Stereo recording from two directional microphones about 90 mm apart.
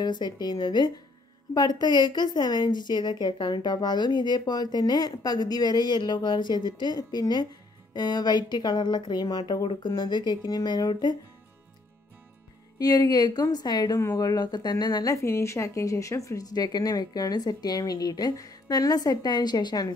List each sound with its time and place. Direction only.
0.0 s a woman's voice: 50° left (ahead or behind)
12.7 s a woman's voice: 45° left (ahead or behind)